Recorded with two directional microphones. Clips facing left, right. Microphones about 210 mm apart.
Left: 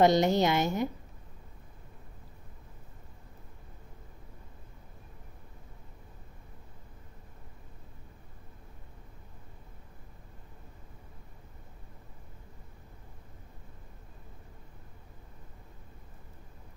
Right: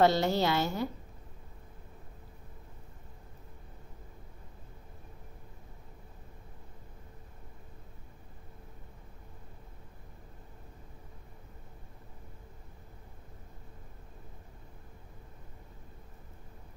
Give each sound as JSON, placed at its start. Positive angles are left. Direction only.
{"t": 0.0, "sound": "a woman's voice", "side_deg": 20}